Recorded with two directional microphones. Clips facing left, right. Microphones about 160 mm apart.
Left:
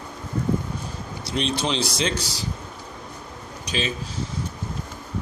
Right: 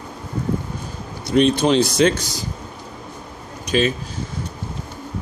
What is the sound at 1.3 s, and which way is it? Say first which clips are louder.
Speech: right 10 dB; 50° right (ahead or behind).